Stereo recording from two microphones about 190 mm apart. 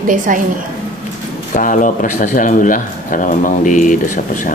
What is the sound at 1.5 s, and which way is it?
A man's voice, 45° left (ahead or behind).